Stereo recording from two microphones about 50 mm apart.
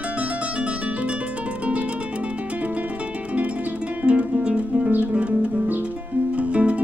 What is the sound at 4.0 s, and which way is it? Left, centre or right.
Music, right.